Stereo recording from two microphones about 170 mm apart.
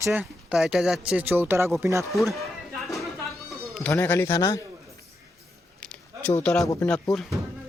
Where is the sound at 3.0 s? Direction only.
Centre (ahead or behind).